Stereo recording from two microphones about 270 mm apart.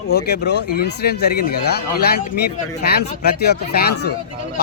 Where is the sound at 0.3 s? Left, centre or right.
Left.